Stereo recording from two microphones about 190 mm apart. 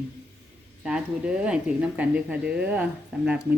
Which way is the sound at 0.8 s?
5° right (ahead or behind).